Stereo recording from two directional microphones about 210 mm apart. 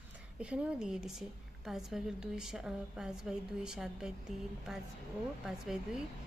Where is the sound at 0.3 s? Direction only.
5° right (ahead or behind).